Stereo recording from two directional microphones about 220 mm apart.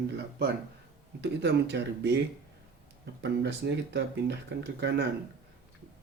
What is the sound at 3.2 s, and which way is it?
Speech, 50° right (ahead or behind).